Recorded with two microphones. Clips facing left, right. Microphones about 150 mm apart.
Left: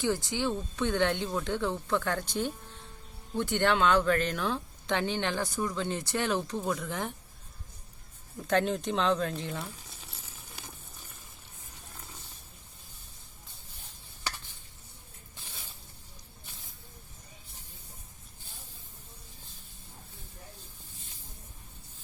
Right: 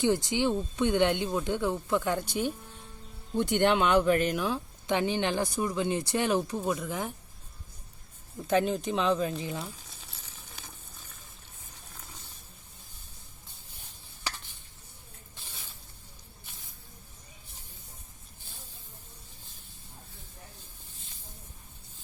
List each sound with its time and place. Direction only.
0.0 s speech: 20° right (ahead or behind)
3.3 s speech: 15° right (ahead or behind)
8.4 s speech: 5° right (ahead or behind)